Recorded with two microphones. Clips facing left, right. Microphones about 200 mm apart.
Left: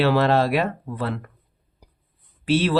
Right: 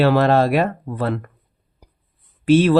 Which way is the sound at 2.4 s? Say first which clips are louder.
Right 7 dB; 45° right (ahead or behind).